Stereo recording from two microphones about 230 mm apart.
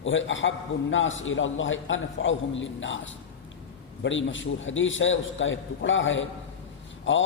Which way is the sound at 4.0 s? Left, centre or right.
Left.